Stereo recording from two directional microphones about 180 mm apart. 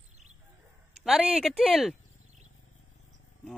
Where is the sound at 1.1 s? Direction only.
5° right (ahead or behind).